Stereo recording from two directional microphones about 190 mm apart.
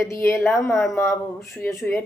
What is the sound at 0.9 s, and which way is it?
Speech, 15° left (ahead or behind).